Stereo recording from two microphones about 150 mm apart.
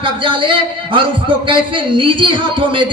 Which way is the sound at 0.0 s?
35° right (ahead or behind).